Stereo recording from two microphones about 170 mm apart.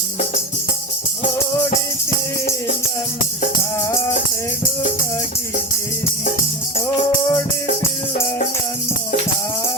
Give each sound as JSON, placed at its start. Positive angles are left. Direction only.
{"t": 3.6, "sound": "music", "side_deg": 15}
{"t": 7.3, "sound": "music", "side_deg": 15}